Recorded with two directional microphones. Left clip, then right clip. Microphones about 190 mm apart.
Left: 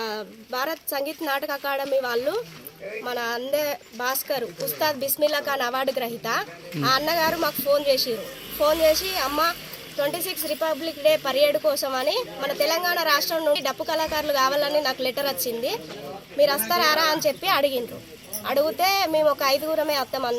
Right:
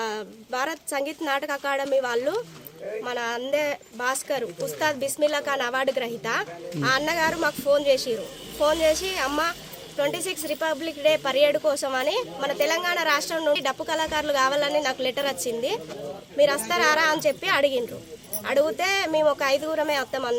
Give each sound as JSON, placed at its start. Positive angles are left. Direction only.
{"t": 0.2, "sound": "a woman's voice", "side_deg": -5}
{"t": 8.8, "sound": "speech", "side_deg": -30}
{"t": 9.1, "sound": "speech", "side_deg": -5}
{"t": 10.2, "sound": "speech", "side_deg": -30}
{"t": 10.5, "sound": "a woman's voice", "side_deg": -5}
{"t": 16.5, "sound": "a woman's voice", "side_deg": -5}